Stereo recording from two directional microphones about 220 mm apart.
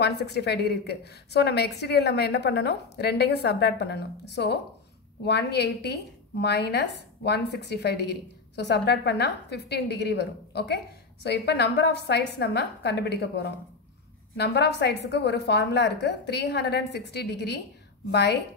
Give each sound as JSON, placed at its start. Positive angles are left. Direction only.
{"t": 0.0, "sound": "a woman's voice", "side_deg": 50}